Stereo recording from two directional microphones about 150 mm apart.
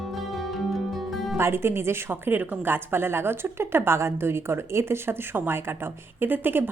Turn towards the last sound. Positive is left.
turn(degrees=-15)  # may be behind; listen again after turning